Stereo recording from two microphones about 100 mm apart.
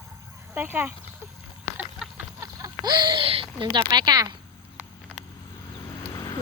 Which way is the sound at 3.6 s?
55° right (ahead or behind).